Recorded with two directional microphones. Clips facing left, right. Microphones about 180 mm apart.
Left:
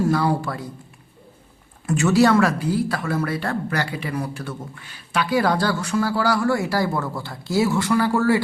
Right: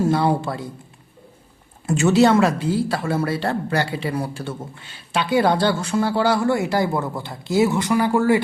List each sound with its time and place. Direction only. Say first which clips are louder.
0.0 s speech: right 1 dB; 25° right (ahead or behind)
1.9 s speech: right 1 dB; 25° right (ahead or behind)